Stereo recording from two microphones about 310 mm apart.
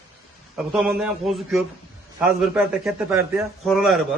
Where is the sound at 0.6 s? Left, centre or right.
Centre.